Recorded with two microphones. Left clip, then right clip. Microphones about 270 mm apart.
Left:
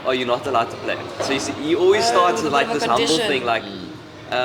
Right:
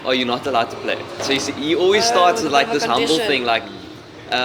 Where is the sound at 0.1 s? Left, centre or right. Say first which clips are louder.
Right 1 dB; right.